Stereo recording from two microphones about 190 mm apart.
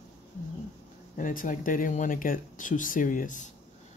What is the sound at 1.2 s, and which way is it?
Speech, 45° left (ahead or behind).